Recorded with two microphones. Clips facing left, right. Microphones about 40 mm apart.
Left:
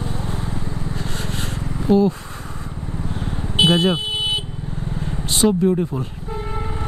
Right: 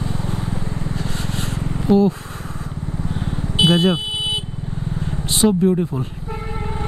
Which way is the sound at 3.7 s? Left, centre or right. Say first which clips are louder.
Right 2 dB; centre.